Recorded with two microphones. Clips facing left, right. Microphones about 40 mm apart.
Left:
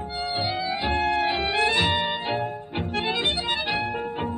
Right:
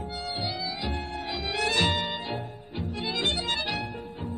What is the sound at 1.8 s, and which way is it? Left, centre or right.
Music, centre.